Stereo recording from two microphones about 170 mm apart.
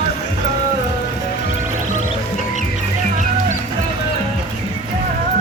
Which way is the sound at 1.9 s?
45° left (ahead or behind).